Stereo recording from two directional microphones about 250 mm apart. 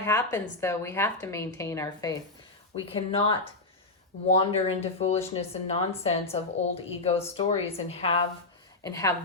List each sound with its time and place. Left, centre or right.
0.0 s speech: centre
4.4 s speech: left